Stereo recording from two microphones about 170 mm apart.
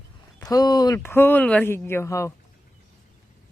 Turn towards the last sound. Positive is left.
turn(degrees=15)  # may be behind; listen again after turning